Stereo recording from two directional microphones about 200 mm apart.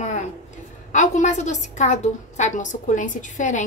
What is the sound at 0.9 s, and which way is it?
A woman's voice, 35° left (ahead or behind).